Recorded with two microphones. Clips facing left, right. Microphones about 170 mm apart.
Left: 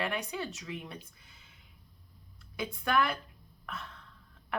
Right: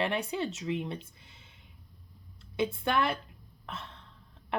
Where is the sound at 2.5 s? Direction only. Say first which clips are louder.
Right 2 dB; 25° right (ahead or behind).